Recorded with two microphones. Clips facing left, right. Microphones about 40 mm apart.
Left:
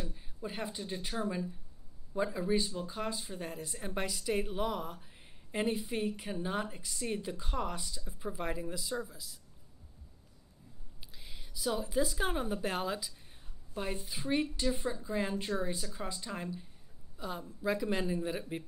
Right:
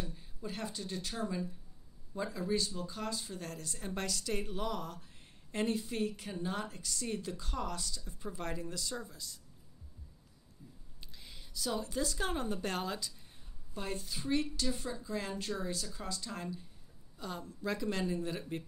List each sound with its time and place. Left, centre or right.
0.0 s a woman's voice: centre
11.1 s a woman's voice: centre